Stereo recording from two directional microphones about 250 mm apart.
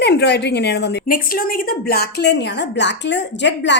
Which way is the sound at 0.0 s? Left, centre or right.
Left.